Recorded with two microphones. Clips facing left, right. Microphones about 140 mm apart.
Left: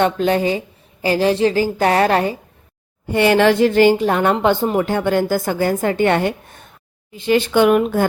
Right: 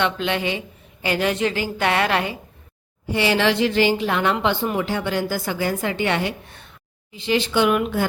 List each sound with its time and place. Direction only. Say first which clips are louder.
0.0 s a woman's voice: left 6 dB; 40° left (ahead or behind)
3.1 s a woman's voice: left 6 dB; 50° left (ahead or behind)